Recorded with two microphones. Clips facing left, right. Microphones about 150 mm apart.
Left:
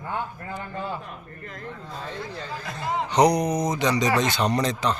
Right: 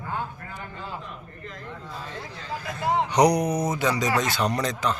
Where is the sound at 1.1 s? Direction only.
50° left (ahead or behind).